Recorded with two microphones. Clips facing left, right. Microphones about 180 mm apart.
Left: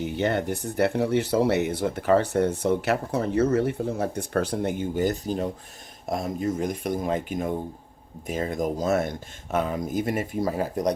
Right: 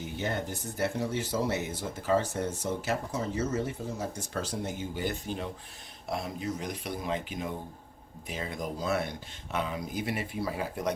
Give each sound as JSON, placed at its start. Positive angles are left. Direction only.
{"t": 0.0, "sound": "speech", "side_deg": 65}